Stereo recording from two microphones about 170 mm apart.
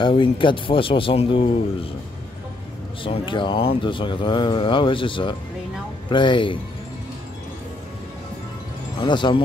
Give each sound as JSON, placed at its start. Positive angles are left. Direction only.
{"t": 0.0, "sound": "a man's voice", "side_deg": 30}
{"t": 3.0, "sound": "speech", "side_deg": 30}
{"t": 9.0, "sound": "speech", "side_deg": 30}